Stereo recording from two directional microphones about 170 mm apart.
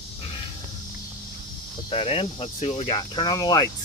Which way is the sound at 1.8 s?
35° left (ahead or behind).